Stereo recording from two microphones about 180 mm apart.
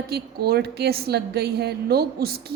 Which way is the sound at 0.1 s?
60° right (ahead or behind).